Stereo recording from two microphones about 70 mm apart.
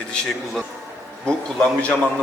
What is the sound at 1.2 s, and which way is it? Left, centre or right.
Speech, centre.